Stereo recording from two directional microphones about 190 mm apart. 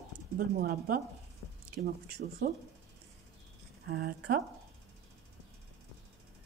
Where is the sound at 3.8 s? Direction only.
55° right (ahead or behind).